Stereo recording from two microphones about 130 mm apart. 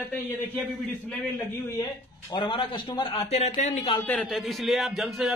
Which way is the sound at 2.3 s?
40° left (ahead or behind).